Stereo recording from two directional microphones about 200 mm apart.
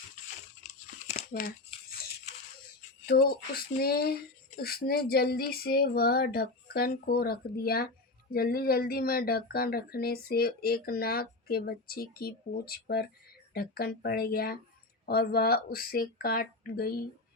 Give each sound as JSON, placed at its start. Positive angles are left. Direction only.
{"t": 1.1, "sound": "crumpling", "side_deg": 45}
{"t": 3.1, "sound": "speech", "side_deg": 50}